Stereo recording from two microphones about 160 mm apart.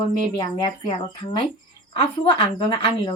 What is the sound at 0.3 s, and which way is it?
Speech, 30° left (ahead or behind).